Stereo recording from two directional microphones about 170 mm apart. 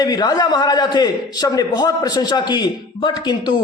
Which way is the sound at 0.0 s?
25° left (ahead or behind).